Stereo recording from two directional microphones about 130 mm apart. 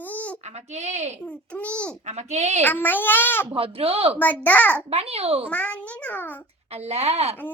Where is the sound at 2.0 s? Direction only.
60° right (ahead or behind).